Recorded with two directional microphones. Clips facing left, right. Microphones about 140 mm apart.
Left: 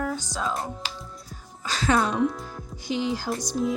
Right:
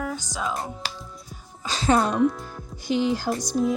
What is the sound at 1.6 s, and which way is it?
Speech, 25° right (ahead or behind).